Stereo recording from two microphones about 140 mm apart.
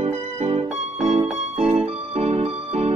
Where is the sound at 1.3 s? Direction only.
50° right (ahead or behind).